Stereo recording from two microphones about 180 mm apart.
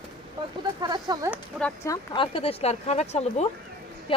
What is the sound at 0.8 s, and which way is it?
Speech, 20° right (ahead or behind).